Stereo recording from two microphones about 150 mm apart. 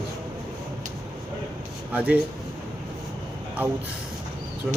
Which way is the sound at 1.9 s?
10° right (ahead or behind).